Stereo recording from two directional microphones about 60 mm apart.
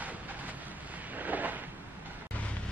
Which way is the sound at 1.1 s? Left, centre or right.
Right.